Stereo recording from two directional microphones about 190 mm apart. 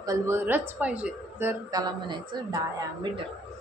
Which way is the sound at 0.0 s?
15° right (ahead or behind).